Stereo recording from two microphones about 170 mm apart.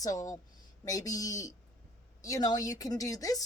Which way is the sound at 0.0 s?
20° left (ahead or behind).